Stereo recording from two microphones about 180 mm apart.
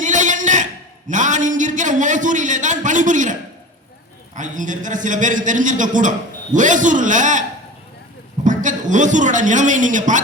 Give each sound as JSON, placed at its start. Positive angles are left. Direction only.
{"t": 0.0, "sound": "a man's voice", "side_deg": -45}
{"t": 4.4, "sound": "a man's voice", "side_deg": -45}
{"t": 8.4, "sound": "a man's voice", "side_deg": -45}